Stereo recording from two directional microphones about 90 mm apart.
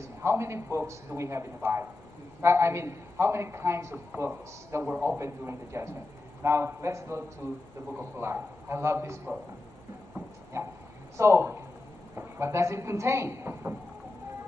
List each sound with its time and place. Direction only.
0.0 s a man's voice: 30° right (ahead or behind)
10.5 s a man's voice: 30° right (ahead or behind)